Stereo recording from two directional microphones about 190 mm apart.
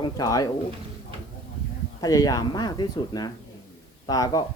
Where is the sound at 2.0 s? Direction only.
20° left (ahead or behind).